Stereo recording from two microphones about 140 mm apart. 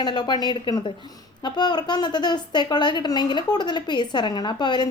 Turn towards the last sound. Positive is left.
turn(degrees=30)  # may be behind; listen again after turning